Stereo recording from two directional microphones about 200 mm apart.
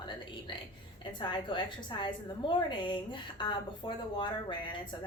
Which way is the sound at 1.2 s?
25° left (ahead or behind).